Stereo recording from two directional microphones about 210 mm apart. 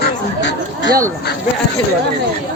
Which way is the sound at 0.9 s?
15° right (ahead or behind).